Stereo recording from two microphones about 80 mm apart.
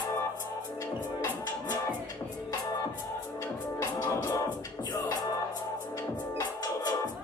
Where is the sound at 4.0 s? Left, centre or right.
Left.